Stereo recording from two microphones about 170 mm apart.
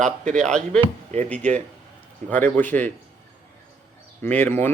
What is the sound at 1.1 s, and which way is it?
Speech, 40° right (ahead or behind).